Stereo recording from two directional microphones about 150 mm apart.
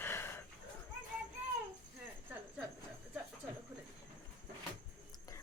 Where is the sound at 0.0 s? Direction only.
15° left (ahead or behind).